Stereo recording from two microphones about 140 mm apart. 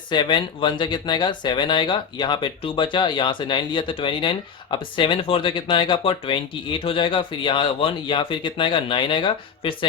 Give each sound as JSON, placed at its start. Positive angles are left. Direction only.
{"t": 0.1, "sound": "speech", "side_deg": 35}